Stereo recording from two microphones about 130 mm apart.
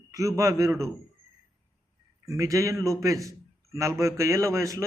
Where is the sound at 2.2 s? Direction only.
25° right (ahead or behind).